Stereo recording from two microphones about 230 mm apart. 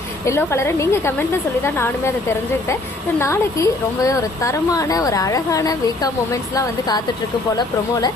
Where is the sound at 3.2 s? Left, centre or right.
Centre.